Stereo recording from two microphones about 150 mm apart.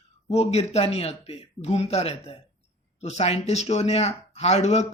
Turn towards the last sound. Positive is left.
turn(degrees=50)  # may be behind; listen again after turning